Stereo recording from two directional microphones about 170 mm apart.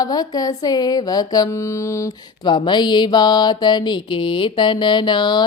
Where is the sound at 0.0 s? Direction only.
20° left (ahead or behind).